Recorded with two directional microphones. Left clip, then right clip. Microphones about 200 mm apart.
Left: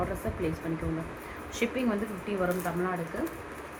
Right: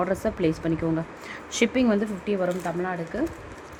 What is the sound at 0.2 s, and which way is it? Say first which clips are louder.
Speech: right 8 dB; 65° right (ahead or behind).